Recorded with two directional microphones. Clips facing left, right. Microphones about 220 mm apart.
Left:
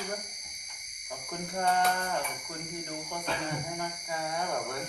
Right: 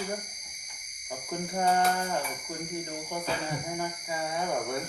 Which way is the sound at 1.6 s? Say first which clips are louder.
Right 2 dB; 5° right (ahead or behind).